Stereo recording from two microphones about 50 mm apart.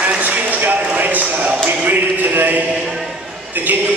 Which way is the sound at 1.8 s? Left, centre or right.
Right.